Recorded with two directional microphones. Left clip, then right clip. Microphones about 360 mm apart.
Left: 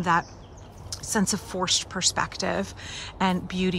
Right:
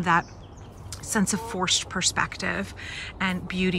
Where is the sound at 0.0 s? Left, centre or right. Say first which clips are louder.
Right 1 dB; centre.